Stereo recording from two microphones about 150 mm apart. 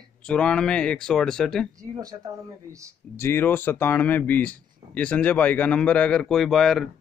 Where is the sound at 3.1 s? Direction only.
15° left (ahead or behind).